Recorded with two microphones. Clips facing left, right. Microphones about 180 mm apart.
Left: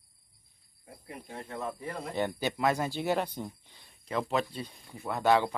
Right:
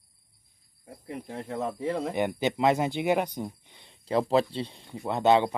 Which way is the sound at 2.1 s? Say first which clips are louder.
Right 4 dB; 20° right (ahead or behind).